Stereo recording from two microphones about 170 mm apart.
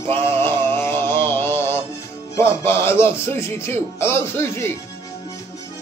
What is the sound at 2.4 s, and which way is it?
Speech, 15° left (ahead or behind).